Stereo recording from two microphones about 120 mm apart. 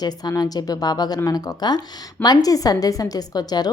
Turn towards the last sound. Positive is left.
turn(degrees=35)  # may be behind; listen again after turning